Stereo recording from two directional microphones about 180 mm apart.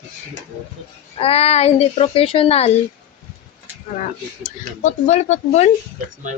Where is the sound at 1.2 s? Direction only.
35° left (ahead or behind).